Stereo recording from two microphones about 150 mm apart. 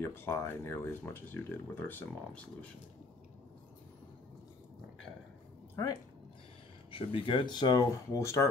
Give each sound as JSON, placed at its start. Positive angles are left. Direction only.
{"t": 0.0, "sound": "speech", "side_deg": 15}
{"t": 5.8, "sound": "speech", "side_deg": 20}
{"t": 6.9, "sound": "speech", "side_deg": 35}